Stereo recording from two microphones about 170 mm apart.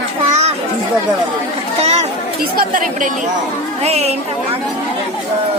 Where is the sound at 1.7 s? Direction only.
40° right (ahead or behind).